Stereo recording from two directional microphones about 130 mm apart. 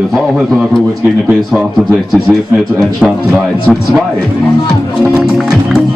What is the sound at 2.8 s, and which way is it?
Speech, 5° right (ahead or behind).